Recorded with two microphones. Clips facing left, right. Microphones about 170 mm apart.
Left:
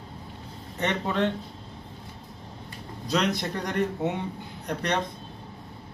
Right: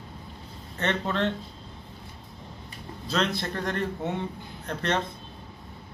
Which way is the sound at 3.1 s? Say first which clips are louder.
Left 2 dB; 15° left (ahead or behind).